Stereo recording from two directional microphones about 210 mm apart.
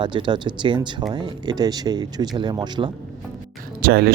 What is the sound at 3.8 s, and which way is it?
Speech, 50° right (ahead or behind).